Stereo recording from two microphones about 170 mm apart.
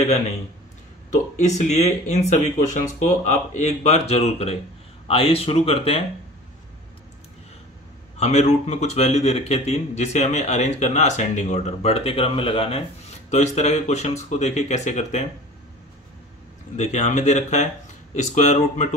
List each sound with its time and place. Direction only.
1.1 s a man's voice: 45° left (ahead or behind)
8.2 s a man's voice: 40° left (ahead or behind)
16.7 s speech: 45° left (ahead or behind)